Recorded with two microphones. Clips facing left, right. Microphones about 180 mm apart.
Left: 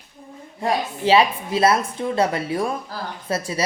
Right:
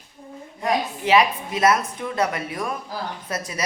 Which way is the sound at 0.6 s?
30° left (ahead or behind).